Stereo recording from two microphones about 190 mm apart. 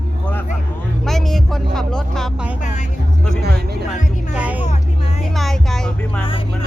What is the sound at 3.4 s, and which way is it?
Music, 60° right (ahead or behind).